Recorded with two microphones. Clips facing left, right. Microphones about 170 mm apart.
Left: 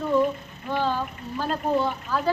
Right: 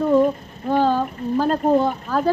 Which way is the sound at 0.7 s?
45° right (ahead or behind).